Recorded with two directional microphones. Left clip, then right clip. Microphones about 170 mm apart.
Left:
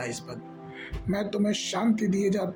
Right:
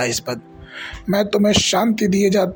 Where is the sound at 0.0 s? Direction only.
50° right (ahead or behind).